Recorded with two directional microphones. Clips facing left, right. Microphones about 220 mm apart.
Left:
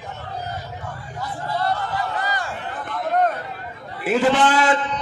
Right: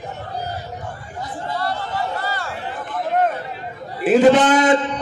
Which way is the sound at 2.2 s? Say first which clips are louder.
Even; 15° left (ahead or behind).